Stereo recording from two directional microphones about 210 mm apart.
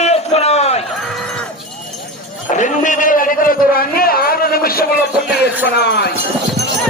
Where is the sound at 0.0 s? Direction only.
30° left (ahead or behind).